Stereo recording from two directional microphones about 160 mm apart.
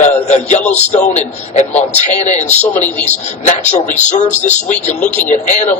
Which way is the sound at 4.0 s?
45° left (ahead or behind).